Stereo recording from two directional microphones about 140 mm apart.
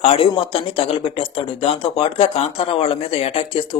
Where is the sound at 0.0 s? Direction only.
45° left (ahead or behind).